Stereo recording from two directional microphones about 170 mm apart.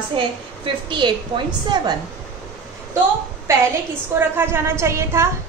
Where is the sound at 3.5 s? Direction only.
15° right (ahead or behind).